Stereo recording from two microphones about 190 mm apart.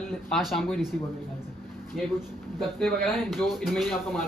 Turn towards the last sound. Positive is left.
turn(degrees=0)  # may be behind; listen again after turning